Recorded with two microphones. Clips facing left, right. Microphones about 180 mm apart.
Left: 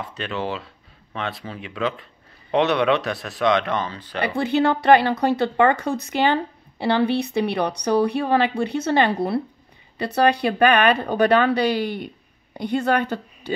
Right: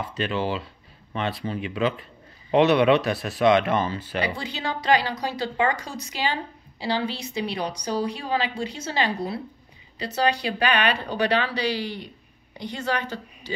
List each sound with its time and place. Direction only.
0.0 s speech: centre (ahead or behind)
4.2 s a woman's voice: 55° left (ahead or behind)